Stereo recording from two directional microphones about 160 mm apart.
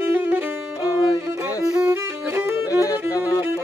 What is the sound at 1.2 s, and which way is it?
Music, 15° right (ahead or behind).